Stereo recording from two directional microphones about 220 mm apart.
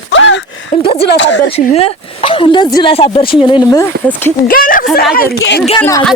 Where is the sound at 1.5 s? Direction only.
25° left (ahead or behind).